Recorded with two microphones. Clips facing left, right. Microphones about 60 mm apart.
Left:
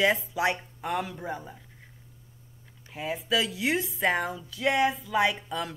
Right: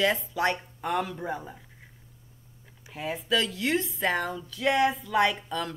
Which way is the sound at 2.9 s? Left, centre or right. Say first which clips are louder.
Even; centre.